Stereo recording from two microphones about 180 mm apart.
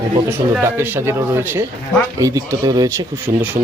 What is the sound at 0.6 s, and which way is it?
Speech, 10° right (ahead or behind).